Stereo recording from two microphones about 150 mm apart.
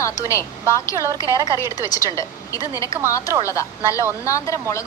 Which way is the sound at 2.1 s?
20° left (ahead or behind).